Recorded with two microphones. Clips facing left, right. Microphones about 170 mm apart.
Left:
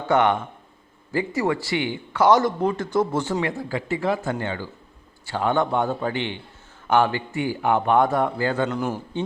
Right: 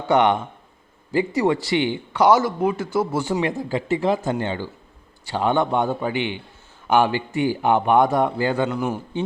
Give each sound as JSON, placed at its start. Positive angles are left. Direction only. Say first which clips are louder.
{"t": 0.1, "sound": "speech", "louder": "right 2 dB", "side_deg": -15}
{"t": 8.7, "sound": "speech", "louder": "right 1 dB", "side_deg": 0}